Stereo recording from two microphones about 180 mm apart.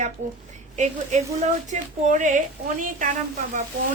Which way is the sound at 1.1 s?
40° right (ahead or behind).